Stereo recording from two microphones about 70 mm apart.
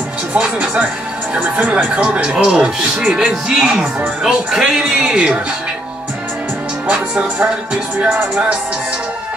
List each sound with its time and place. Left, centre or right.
0.3 s speech: centre
6.9 s speech: centre